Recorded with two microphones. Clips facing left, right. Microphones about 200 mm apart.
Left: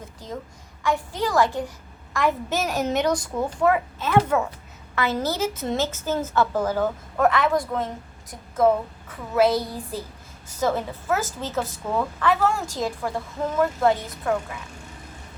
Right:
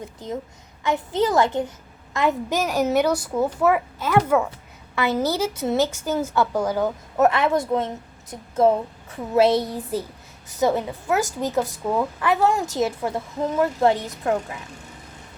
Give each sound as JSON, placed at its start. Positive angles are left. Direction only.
{"t": 0.8, "sound": "a woman's voice", "side_deg": -20}